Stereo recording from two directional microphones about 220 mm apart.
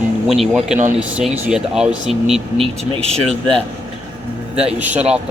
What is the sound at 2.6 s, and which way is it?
Speech, 25° right (ahead or behind).